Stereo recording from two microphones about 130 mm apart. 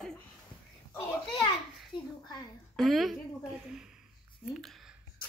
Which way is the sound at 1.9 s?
40° left (ahead or behind).